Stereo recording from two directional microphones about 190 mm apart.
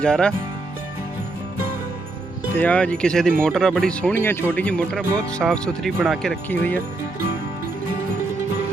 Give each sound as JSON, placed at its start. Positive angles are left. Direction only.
{"t": 0.0, "sound": "speech", "side_deg": 5}
{"t": 2.6, "sound": "speech", "side_deg": 5}